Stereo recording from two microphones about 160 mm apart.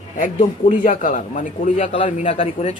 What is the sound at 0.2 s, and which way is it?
Speech, 50° left (ahead or behind).